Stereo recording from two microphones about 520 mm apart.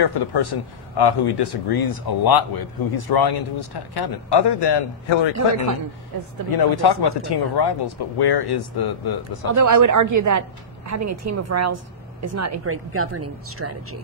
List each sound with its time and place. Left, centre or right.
0.0 s speech: left
6.1 s a woman's voice: right
6.5 s speech: left
9.5 s a woman's voice: right